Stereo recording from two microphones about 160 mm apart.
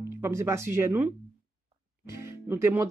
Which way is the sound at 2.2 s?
15° right (ahead or behind).